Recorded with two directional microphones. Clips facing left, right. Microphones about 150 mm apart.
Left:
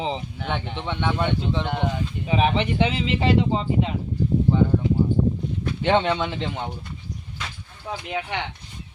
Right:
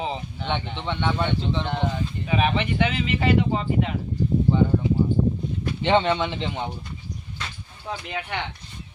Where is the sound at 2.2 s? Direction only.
25° left (ahead or behind).